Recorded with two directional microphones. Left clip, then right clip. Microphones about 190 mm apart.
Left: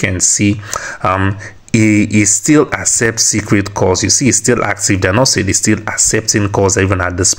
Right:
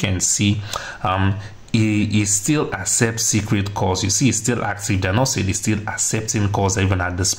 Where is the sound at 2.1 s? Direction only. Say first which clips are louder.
Left 10 dB; 30° left (ahead or behind).